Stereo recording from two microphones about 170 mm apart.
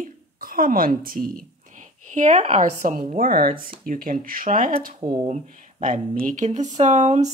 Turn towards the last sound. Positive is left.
turn(degrees=-45)  # may be behind; listen again after turning